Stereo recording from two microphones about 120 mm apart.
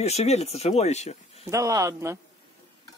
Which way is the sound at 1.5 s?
25° right (ahead or behind).